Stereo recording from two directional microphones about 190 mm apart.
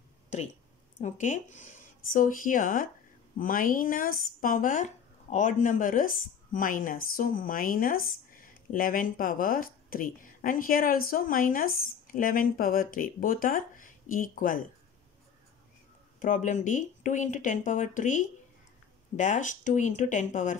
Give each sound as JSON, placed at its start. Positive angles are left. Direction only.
{"t": 0.3, "sound": "speech", "side_deg": 35}
{"t": 16.2, "sound": "speech", "side_deg": 40}